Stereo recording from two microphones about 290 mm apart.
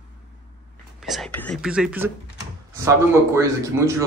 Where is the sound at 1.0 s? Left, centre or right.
Centre.